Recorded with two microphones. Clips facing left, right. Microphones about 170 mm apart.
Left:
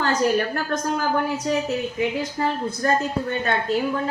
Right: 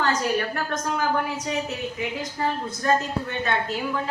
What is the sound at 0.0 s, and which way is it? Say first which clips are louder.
Speech: left 3 dB; 35° left (ahead or behind).